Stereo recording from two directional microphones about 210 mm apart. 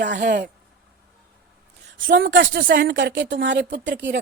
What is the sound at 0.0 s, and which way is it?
Speech, 50° right (ahead or behind).